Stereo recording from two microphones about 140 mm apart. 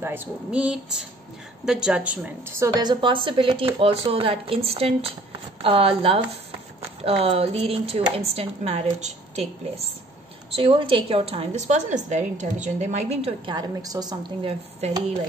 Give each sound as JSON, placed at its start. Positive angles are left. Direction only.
{"t": 0.0, "sound": "a woman's voice", "side_deg": -15}
{"t": 10.5, "sound": "speech", "side_deg": -40}
{"t": 13.5, "sound": "a woman's voice", "side_deg": -30}